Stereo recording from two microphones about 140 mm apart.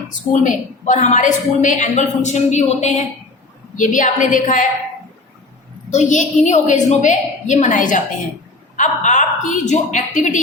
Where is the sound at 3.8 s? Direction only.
65° left (ahead or behind).